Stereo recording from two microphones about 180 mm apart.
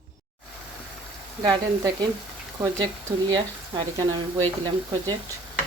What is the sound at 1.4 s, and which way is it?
Speech, 25° right (ahead or behind).